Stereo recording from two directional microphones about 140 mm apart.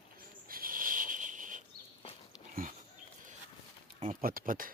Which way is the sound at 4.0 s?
80° right.